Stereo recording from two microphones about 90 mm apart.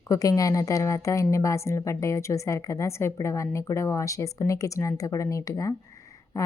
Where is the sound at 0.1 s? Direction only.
40° left (ahead or behind).